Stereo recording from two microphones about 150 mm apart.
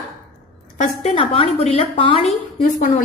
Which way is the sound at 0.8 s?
40° left (ahead or behind).